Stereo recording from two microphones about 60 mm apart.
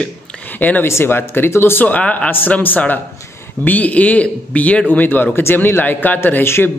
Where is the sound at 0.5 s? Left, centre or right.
Left.